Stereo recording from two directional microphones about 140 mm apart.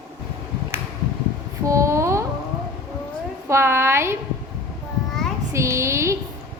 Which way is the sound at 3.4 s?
20° right (ahead or behind).